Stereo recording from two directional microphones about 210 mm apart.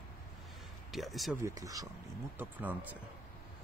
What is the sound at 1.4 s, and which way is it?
Speech, 15° right (ahead or behind).